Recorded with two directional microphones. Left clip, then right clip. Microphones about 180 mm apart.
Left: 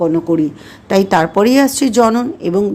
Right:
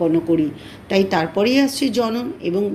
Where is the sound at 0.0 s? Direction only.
25° left (ahead or behind).